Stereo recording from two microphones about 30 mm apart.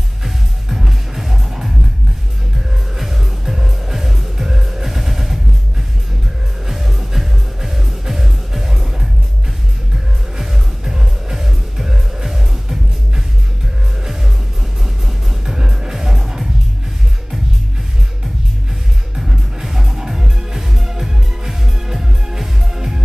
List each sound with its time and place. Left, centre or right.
0.2 s music: centre
3.0 s music: centre
6.7 s music: centre
9.9 s music: centre
15.4 s music: centre
19.1 s music: centre